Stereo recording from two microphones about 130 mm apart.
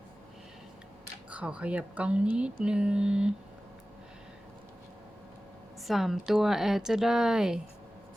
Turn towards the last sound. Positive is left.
turn(degrees=-5)  # may be behind; listen again after turning